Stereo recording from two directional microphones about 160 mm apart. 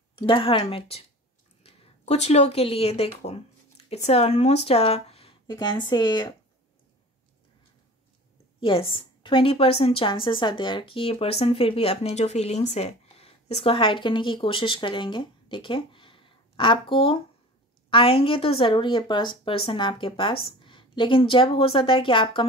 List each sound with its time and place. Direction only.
0.2 s a woman's voice: 30° left (ahead or behind)
5.5 s speech: 25° left (ahead or behind)
8.5 s a woman's voice: 35° left (ahead or behind)